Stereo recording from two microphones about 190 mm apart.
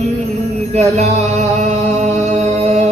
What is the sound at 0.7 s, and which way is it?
Music, 35° right (ahead or behind).